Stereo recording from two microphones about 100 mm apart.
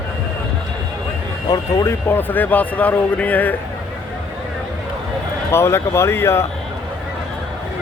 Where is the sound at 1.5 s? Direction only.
40° left (ahead or behind).